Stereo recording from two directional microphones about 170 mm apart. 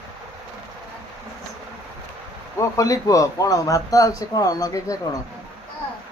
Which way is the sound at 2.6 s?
20° left (ahead or behind).